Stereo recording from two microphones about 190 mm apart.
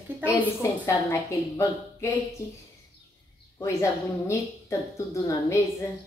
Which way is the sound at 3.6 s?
15° left (ahead or behind).